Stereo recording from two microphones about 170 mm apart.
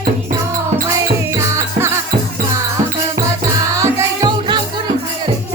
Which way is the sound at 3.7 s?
20° right (ahead or behind).